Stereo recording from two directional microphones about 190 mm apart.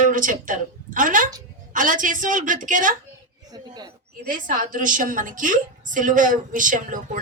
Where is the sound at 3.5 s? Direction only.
20° right (ahead or behind).